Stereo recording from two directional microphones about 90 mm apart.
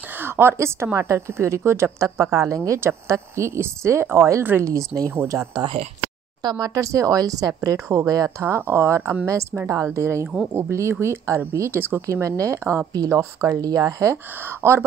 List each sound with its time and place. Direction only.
0.1 s a sound: 25° right (ahead or behind)
0.9 s speech: 35° right (ahead or behind)
8.5 s speech: 30° right (ahead or behind)
14.1 s speech: 25° right (ahead or behind)